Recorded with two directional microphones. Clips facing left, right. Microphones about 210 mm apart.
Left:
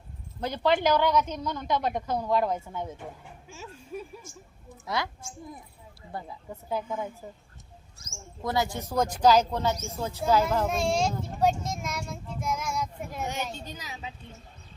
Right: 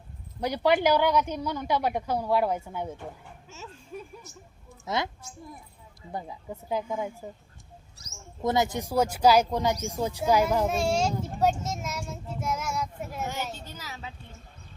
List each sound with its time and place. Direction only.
0.3 s a woman's voice: 15° right (ahead or behind)
3.5 s music: 10° left (ahead or behind)
4.3 s a woman's voice: 50° left (ahead or behind)
4.9 s a woman's voice: 20° right (ahead or behind)
6.1 s a woman's voice: 15° right (ahead or behind)
8.4 s a woman's voice: 20° right (ahead or behind)
11.6 s child singing: 5° right (ahead or behind)
13.2 s a child's voice: 15° left (ahead or behind)